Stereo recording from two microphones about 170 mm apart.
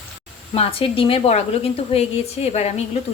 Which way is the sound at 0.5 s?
35° left (ahead or behind).